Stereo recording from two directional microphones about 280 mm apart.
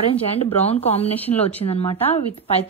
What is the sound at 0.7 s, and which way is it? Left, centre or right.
Speech, left.